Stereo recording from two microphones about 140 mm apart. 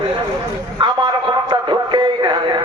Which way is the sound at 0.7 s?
35° right (ahead or behind).